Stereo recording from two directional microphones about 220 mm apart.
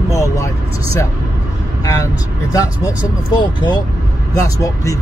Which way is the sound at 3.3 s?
20° left (ahead or behind).